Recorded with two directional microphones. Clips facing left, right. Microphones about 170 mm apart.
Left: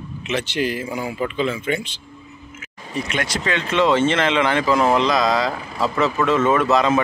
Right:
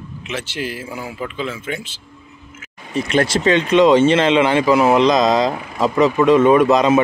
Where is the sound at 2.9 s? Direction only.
30° right (ahead or behind).